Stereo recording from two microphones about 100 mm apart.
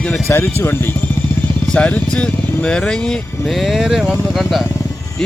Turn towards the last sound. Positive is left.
turn(degrees=-5)  # may be behind; listen again after turning